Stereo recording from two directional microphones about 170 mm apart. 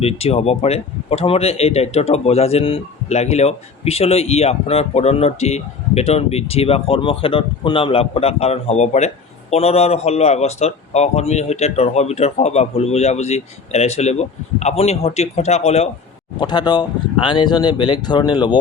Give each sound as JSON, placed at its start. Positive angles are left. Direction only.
{"t": 0.0, "sound": "speech", "side_deg": 35}
{"t": 16.4, "sound": "speech", "side_deg": 25}